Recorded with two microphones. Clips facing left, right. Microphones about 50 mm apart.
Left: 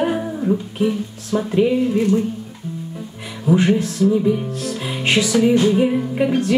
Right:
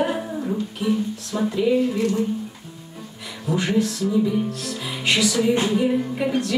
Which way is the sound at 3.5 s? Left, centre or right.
Left.